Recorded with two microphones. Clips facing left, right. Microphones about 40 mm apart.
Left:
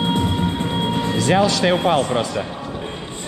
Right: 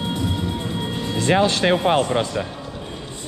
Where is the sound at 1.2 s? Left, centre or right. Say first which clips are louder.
Even; right.